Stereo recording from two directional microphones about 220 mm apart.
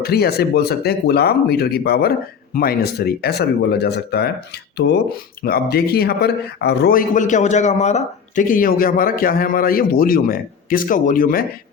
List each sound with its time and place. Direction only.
0.0 s speech: 45° left (ahead or behind)